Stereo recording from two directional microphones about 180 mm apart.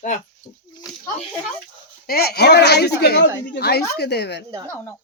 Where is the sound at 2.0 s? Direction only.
60° left (ahead or behind).